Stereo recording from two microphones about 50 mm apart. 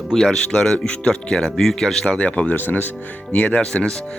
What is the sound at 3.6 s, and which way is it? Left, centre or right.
Speech, centre.